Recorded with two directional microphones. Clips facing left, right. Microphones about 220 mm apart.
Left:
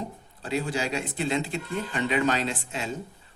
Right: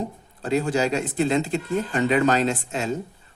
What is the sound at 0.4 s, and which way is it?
Speech, 45° right (ahead or behind).